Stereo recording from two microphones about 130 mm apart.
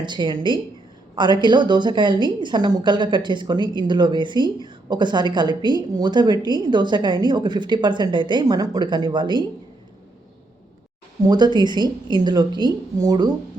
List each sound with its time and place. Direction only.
0.0 s a woman's voice: 35° right (ahead or behind)
11.3 s a woman's voice: 35° right (ahead or behind)